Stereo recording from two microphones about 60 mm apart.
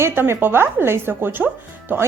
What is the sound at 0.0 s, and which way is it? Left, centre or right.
A woman's voice, right.